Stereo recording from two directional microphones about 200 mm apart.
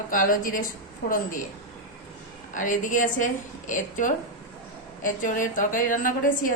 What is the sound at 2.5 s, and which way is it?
A woman's voice, 40° left (ahead or behind).